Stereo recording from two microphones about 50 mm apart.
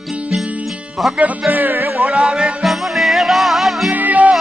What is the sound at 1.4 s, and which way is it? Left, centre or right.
Music, right.